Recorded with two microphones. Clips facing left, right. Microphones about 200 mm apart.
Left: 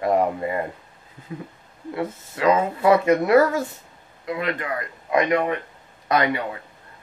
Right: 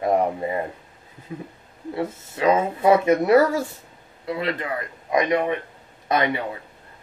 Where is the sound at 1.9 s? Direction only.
25° right (ahead or behind).